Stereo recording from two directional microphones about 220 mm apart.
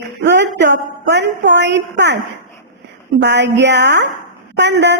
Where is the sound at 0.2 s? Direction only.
50° right (ahead or behind).